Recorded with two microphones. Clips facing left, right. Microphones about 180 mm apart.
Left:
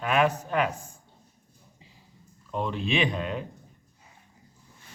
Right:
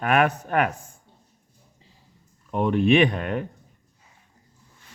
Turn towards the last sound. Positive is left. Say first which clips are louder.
# right 7 dB
turn(degrees=-60)  # may be behind; listen again after turning